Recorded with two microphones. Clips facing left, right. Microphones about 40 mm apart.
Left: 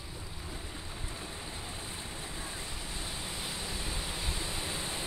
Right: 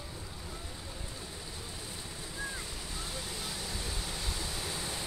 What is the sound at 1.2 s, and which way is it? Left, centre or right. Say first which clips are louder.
Waves: left 2 dB; left.